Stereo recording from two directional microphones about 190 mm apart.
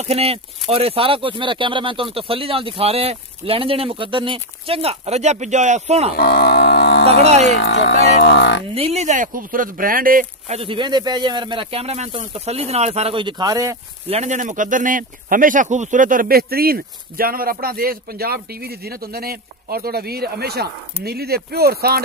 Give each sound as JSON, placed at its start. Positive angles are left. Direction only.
{"t": 0.0, "sound": "speech", "side_deg": -30}
{"t": 6.1, "sound": "cattle", "side_deg": 55}
{"t": 7.2, "sound": "speech", "side_deg": -35}
{"t": 7.5, "sound": "speech", "side_deg": 65}
{"t": 8.7, "sound": "speech", "side_deg": -35}
{"t": 10.5, "sound": "speech", "side_deg": -30}
{"t": 14.0, "sound": "speech", "side_deg": -35}